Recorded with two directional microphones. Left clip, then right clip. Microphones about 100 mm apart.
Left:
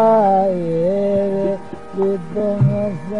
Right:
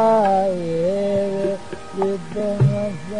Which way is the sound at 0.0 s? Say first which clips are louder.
Left 3 dB; 20° right (ahead or behind).